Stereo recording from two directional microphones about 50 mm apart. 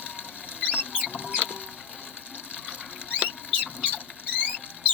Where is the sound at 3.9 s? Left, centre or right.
Right.